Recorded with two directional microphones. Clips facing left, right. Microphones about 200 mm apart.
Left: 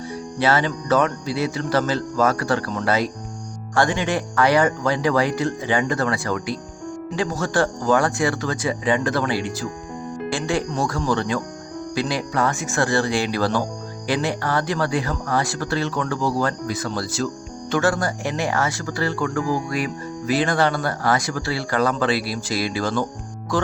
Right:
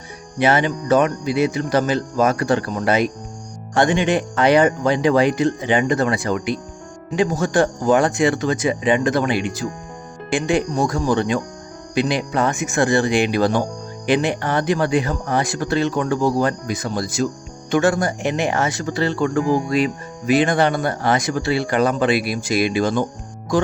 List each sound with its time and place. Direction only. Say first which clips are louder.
0.3 s speech: right 3 dB; 20° right (ahead or behind)